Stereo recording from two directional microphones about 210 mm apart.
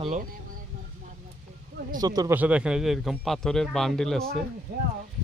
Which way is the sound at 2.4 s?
5° right (ahead or behind).